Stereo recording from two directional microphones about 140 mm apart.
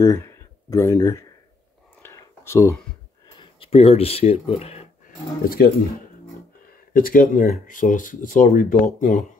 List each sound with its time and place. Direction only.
0.0 s speech: 20° left (ahead or behind)
2.0 s a sound: 20° left (ahead or behind)
3.3 s speech: 40° left (ahead or behind)
5.0 s speech: 90° left
6.9 s speech: 90° left; by 9.2 s 65° left (ahead or behind)